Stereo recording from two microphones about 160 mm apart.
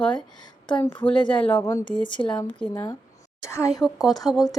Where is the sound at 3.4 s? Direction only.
15° left (ahead or behind).